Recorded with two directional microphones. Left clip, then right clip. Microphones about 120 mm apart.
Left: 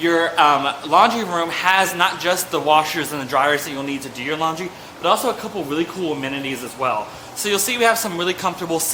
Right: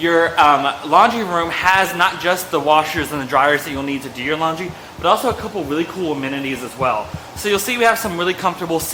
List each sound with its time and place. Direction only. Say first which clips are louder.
0.0 s a man's voice: right 2 dB; 25° right (ahead or behind)